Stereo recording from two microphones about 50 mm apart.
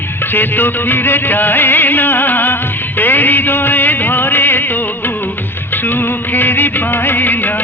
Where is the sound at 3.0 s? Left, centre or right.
Left.